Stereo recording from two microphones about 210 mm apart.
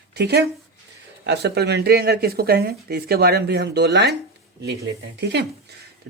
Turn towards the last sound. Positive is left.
turn(degrees=-55)  # may be behind; listen again after turning